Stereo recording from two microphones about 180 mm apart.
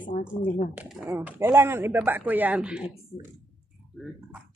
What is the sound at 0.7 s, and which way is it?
Speech, 10° right (ahead or behind).